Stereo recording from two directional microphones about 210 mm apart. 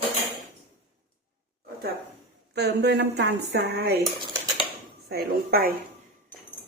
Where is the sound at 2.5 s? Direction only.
55° right (ahead or behind).